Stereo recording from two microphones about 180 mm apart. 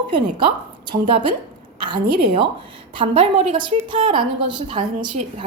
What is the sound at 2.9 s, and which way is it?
A woman's voice, 30° right (ahead or behind).